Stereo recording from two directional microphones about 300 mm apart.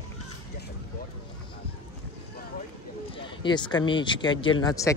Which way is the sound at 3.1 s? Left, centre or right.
Centre.